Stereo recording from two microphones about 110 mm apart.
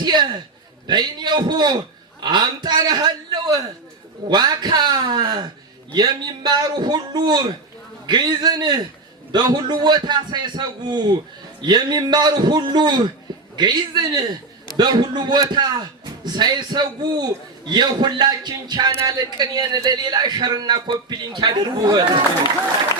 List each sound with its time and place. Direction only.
0.0 s a man's voice: 40° right (ahead or behind)